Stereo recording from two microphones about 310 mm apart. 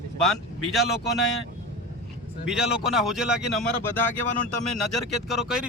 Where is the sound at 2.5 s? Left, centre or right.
Centre.